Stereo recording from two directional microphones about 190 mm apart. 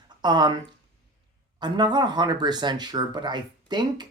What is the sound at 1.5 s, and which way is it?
Speech, 25° right (ahead or behind).